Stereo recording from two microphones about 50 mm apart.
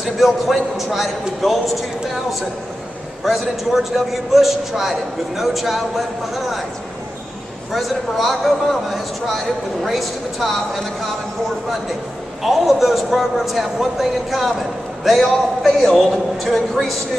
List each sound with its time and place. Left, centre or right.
0.0 s a man's voice: centre
3.3 s a man's voice: centre
7.7 s a man's voice: centre
12.4 s a man's voice: centre